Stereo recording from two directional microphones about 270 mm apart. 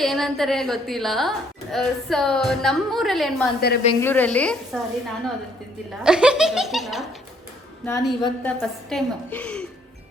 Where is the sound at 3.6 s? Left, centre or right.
Left.